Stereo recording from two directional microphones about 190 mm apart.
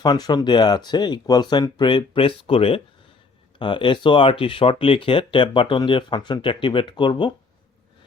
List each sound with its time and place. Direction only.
0.0 s speech: 20° left (ahead or behind)